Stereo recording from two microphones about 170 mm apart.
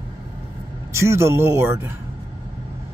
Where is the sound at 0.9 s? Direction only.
15° right (ahead or behind).